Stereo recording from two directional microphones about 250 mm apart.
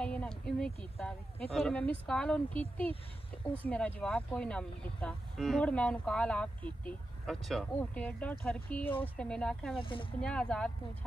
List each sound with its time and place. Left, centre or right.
0.0 s a sound: centre
0.9 s speech: centre
9.8 s speech: centre
10.2 s speech: centre